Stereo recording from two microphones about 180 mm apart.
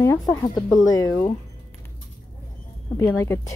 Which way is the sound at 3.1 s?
15° left (ahead or behind).